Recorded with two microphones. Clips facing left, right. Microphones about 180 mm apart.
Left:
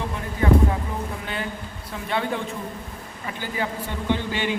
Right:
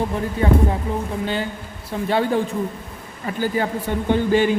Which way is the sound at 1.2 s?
30° right (ahead or behind).